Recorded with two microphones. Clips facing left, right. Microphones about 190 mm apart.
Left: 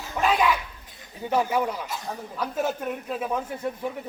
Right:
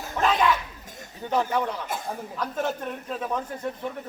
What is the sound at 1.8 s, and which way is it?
Speech, 50° right (ahead or behind).